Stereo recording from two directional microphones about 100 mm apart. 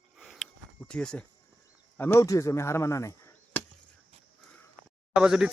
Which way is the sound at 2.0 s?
20° left (ahead or behind).